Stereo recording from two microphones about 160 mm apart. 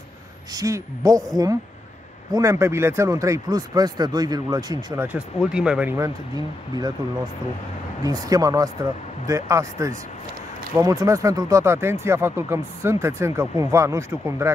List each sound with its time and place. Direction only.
0.5 s speech: 20° right (ahead or behind)
5.0 s speech: 5° right (ahead or behind)
5.9 s speech: 20° right (ahead or behind)
8.0 s speech: 20° right (ahead or behind)